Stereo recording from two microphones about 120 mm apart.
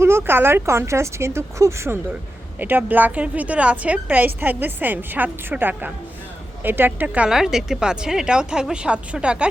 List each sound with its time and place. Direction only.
0.0 s a woman's voice: 20° right (ahead or behind)